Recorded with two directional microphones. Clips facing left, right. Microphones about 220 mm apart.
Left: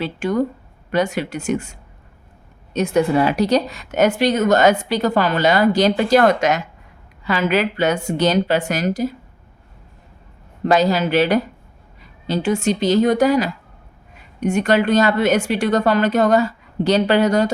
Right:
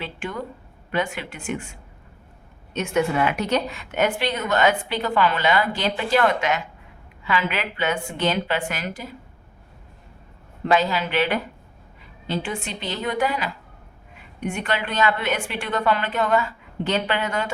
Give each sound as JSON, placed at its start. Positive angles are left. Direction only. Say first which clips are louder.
{"t": 0.0, "sound": "a woman's voice", "louder": "left 11 dB", "side_deg": 40}
{"t": 10.7, "sound": "a woman's voice", "louder": "left 5 dB", "side_deg": 40}